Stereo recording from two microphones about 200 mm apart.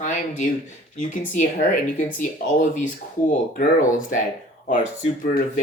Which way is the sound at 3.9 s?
40° left (ahead or behind).